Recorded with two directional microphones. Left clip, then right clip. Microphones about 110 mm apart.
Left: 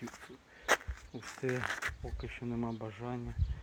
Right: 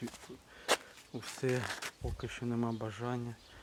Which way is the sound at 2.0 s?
15° right (ahead or behind).